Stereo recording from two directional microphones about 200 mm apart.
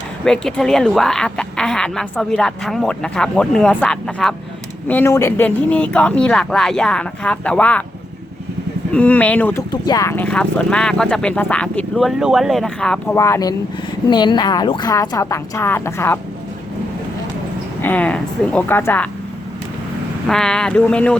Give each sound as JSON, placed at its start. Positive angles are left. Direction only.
{"t": 0.3, "sound": "speech", "side_deg": 5}
{"t": 8.9, "sound": "speech", "side_deg": 5}
{"t": 13.1, "sound": "speech", "side_deg": 15}
{"t": 17.8, "sound": "speech", "side_deg": 5}
{"t": 20.2, "sound": "speech", "side_deg": 5}